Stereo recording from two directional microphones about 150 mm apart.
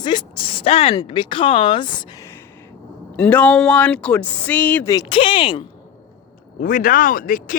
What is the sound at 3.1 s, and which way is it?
Speech, 10° left (ahead or behind).